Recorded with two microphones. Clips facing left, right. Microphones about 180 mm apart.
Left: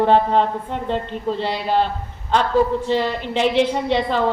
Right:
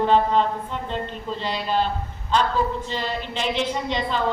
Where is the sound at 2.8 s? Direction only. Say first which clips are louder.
Left 8 dB; 60° left (ahead or behind).